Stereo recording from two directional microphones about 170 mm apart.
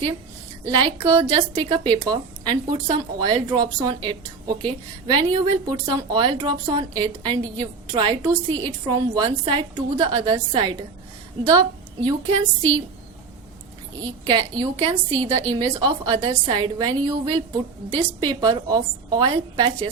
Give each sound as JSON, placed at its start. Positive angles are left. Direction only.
{"t": 0.8, "sound": "a woman's voice", "side_deg": -30}
{"t": 12.0, "sound": "a woman's voice", "side_deg": -25}
{"t": 14.0, "sound": "a woman's voice", "side_deg": -25}